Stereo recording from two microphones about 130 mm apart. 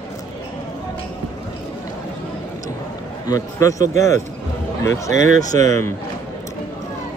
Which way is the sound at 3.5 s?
25° left (ahead or behind).